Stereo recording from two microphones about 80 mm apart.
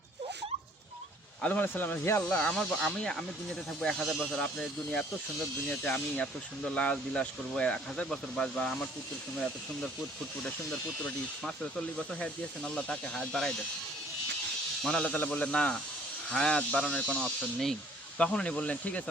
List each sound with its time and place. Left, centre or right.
1.4 s speech: centre
2.2 s speech: centre
4.3 s speech: centre
10.4 s speech: centre
14.8 s speech: centre
17.2 s speech: centre